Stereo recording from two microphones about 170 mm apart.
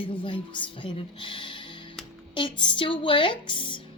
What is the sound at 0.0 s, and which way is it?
A woman's voice, 30° left (ahead or behind).